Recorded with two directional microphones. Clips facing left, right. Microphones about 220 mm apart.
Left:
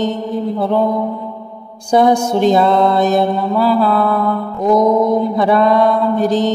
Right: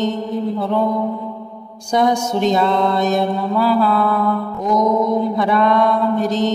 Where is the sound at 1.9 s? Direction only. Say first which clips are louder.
Left 5 dB; 30° left (ahead or behind).